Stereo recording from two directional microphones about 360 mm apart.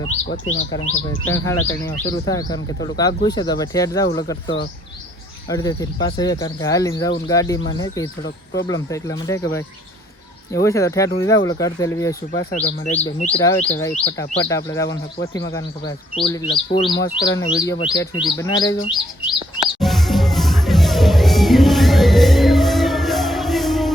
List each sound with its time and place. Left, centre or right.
0.0 s speech: centre
19.8 s music: centre